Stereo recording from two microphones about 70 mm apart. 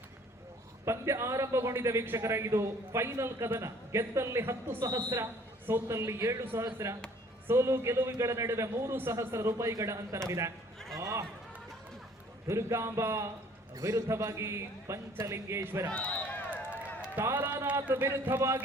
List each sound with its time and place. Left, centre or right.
0.9 s a man's voice: right
6.4 s a man's voice: right
10.9 s run: right
12.5 s a man's voice: right
13.7 s a man's voice: right
15.9 s a man's voice: centre
17.2 s a man's voice: right